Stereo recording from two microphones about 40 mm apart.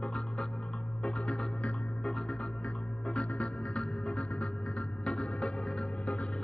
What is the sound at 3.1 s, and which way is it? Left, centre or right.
Music, left.